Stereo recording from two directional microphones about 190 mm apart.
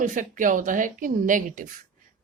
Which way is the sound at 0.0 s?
45° right (ahead or behind).